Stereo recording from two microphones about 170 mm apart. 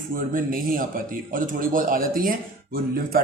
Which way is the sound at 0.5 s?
55° right (ahead or behind).